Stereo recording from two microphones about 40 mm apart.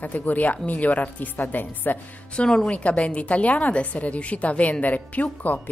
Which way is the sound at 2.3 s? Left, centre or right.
Left.